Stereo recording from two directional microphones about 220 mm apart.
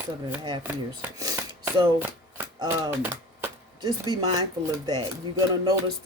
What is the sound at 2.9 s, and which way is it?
Speech, 10° right (ahead or behind).